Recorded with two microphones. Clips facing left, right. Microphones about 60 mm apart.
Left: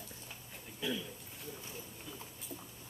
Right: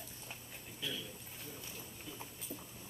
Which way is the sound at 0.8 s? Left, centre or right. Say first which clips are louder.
Left 6 dB; centre.